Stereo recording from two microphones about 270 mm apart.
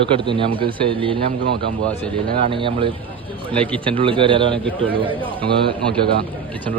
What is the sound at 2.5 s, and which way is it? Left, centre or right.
Speech, centre.